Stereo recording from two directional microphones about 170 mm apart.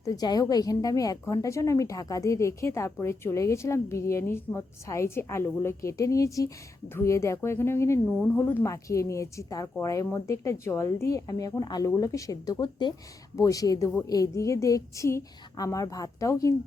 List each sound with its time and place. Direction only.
0.0 s a woman's voice: 20° left (ahead or behind)